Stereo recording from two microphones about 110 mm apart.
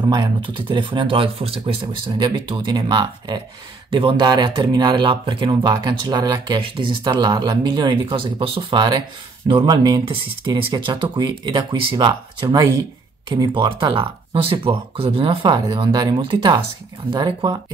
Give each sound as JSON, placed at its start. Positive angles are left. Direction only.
{"t": 0.0, "sound": "speech", "side_deg": -45}